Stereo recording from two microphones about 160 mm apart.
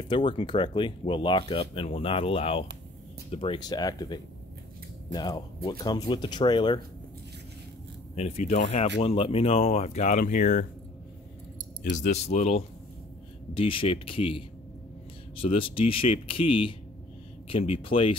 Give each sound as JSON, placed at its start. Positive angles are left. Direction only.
{"t": 0.1, "sound": "speech", "side_deg": 30}
{"t": 8.2, "sound": "speech", "side_deg": 45}
{"t": 11.8, "sound": "speech", "side_deg": 55}
{"t": 15.4, "sound": "speech", "side_deg": 35}